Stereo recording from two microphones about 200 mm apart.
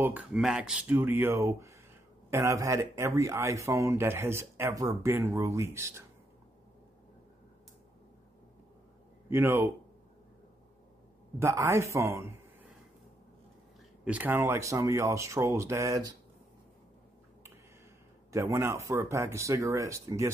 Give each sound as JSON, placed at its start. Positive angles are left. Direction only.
{"t": 0.0, "sound": "speech", "side_deg": -10}
{"t": 9.3, "sound": "speech", "side_deg": -10}
{"t": 11.3, "sound": "speech", "side_deg": -15}
{"t": 14.0, "sound": "speech", "side_deg": -10}
{"t": 18.3, "sound": "speech", "side_deg": -15}